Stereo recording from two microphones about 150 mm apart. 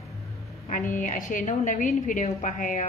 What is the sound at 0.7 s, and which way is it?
A woman's voice, 60° left (ahead or behind).